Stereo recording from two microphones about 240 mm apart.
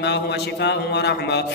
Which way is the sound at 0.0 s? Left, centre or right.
Left.